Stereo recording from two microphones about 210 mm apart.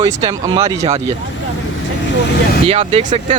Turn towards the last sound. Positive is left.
turn(degrees=-35)  # may be behind; listen again after turning